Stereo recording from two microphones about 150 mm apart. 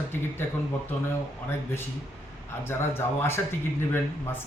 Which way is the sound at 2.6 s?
15° left (ahead or behind).